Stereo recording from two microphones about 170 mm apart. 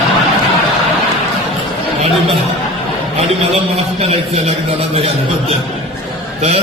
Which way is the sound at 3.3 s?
35° right (ahead or behind).